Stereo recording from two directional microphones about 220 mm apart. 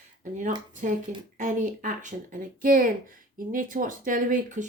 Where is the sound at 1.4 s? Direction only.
35° right (ahead or behind).